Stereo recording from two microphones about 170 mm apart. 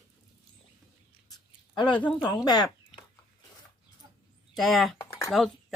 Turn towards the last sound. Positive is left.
turn(degrees=0)  # may be behind; listen again after turning